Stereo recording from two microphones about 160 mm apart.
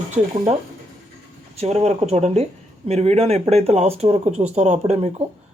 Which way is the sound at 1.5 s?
40° right (ahead or behind).